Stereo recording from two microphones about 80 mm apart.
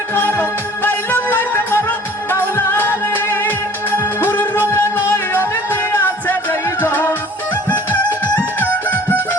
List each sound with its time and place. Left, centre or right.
0.1 s music: left
8.9 s music: left